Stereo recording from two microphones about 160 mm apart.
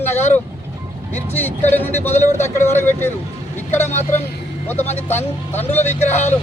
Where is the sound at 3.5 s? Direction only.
15° left (ahead or behind).